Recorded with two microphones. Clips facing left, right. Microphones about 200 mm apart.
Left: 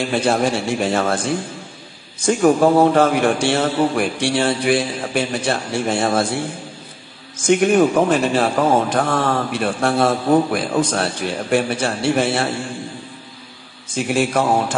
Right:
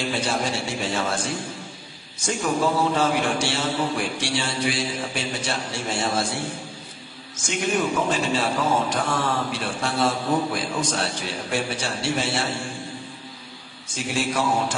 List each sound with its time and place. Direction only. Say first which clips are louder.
0.0 s a man's voice: left 8 dB; 55° left (ahead or behind)
2.2 s a man's voice: left 9 dB; 55° left (ahead or behind)
7.4 s a man's voice: left 10 dB; 55° left (ahead or behind)
13.9 s a man's voice: left 7 dB; 55° left (ahead or behind)